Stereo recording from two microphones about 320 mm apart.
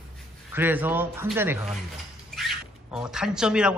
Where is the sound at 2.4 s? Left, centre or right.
Centre.